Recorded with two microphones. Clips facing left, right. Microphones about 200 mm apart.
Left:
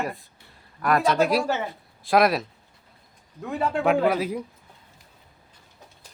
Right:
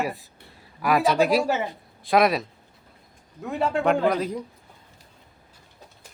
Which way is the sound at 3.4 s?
Centre (ahead or behind).